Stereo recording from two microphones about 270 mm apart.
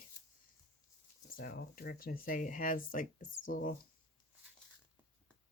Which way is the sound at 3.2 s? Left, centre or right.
Left.